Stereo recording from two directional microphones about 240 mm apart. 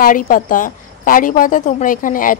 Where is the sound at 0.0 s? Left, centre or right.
Left.